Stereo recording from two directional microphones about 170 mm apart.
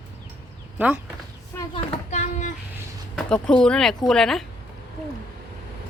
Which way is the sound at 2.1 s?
45° left (ahead or behind).